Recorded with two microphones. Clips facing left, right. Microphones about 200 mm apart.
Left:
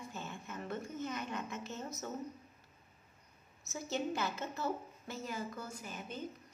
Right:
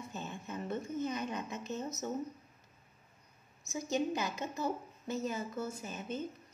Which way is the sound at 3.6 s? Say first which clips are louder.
Right 4 dB; 15° right (ahead or behind).